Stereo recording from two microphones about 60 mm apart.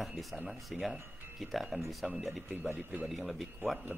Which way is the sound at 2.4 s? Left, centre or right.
Right.